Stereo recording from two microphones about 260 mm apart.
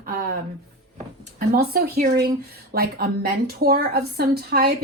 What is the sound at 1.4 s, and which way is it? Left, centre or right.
A woman's voice, right.